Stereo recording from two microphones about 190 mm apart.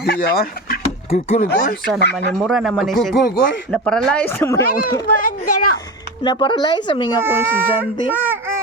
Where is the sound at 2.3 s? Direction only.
Centre (ahead or behind); by 7.1 s 25° left (ahead or behind).